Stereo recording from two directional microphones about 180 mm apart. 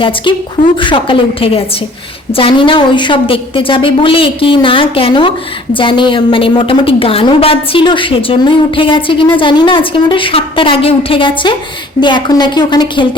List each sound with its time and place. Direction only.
0.8 s a woman's voice: 30° left (ahead or behind)